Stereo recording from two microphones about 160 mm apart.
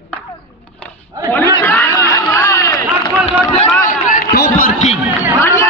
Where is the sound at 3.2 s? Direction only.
50° left (ahead or behind).